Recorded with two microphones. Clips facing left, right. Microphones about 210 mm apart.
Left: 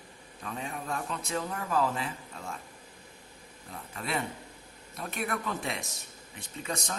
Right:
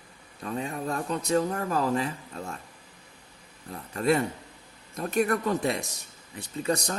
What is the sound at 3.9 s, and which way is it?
A man's voice, 45° right (ahead or behind).